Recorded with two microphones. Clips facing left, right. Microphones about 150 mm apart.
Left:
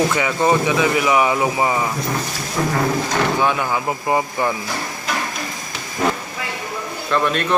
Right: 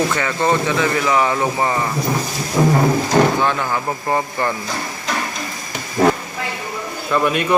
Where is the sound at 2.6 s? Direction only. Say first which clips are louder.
Right 6 dB; 20° right (ahead or behind).